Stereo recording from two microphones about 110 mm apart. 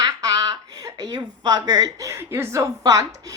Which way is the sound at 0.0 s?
35° right (ahead or behind).